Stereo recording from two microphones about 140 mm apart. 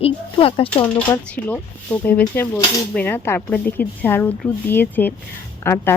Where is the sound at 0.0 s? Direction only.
40° left (ahead or behind).